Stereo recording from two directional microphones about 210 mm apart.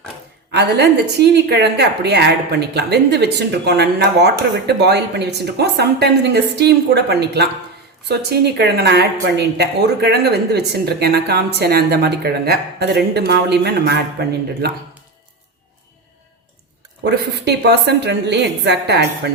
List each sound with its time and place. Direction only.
0.5 s a woman's voice: 50° right (ahead or behind)
17.0 s a woman's voice: 55° right (ahead or behind)